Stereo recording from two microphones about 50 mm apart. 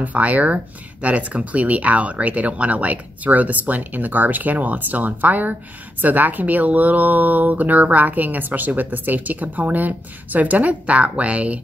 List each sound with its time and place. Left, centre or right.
0.0 s speech: right